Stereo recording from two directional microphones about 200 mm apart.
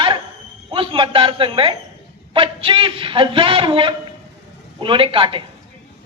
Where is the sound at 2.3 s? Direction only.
25° right (ahead or behind).